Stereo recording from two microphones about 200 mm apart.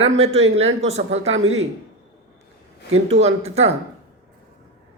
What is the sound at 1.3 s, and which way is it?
Speech, 80° right.